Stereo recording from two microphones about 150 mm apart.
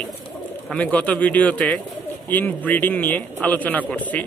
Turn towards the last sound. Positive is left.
turn(degrees=10)  # may be behind; listen again after turning